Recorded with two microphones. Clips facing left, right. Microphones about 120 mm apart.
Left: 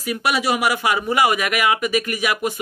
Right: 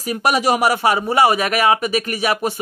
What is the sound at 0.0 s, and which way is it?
Speech, 40° right (ahead or behind).